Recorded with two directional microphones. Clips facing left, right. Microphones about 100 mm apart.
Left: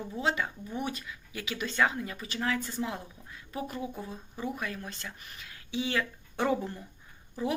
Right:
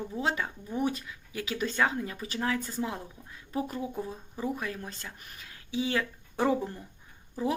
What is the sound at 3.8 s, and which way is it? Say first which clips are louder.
Speech: right 3 dB; 5° left (ahead or behind).